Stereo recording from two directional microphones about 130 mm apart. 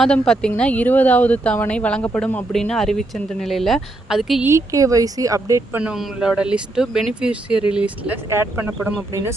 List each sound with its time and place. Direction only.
0.0 s speech: 5° left (ahead or behind)
4.4 s speech: 25° right (ahead or behind)
5.7 s speech: 5° right (ahead or behind)